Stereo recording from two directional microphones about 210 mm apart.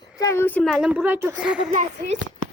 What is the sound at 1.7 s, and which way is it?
Speech, 35° right (ahead or behind).